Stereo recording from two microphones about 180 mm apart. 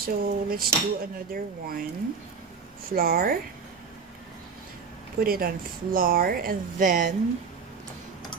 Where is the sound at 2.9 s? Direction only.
55° right (ahead or behind).